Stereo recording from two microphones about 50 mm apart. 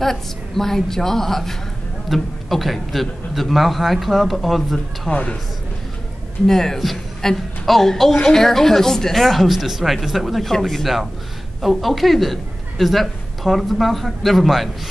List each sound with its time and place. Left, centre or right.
0.0 s a woman's voice: centre
5.1 s speech: left
6.4 s a woman's voice: centre